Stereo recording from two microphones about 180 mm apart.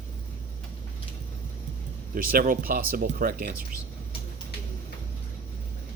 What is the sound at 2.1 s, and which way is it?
Speech, 55° right (ahead or behind).